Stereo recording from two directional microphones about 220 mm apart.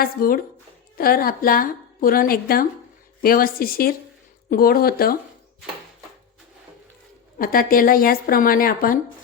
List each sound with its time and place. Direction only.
0.0 s a woman's voice: 40° left (ahead or behind)
7.3 s a woman's voice: 40° left (ahead or behind)